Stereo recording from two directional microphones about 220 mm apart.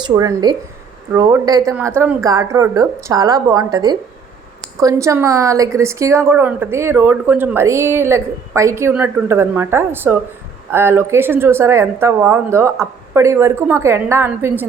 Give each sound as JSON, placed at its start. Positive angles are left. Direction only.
{"t": 0.0, "sound": "a woman's voice", "side_deg": -15}